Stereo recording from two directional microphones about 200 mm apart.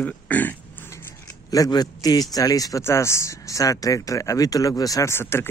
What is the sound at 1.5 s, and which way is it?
A man's voice, 20° left (ahead or behind).